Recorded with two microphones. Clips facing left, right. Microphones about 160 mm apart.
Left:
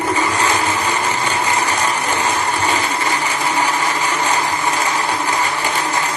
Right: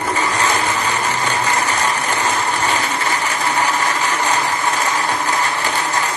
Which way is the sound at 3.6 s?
10° left (ahead or behind).